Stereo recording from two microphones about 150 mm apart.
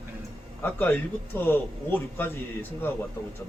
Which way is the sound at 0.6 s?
10° left (ahead or behind).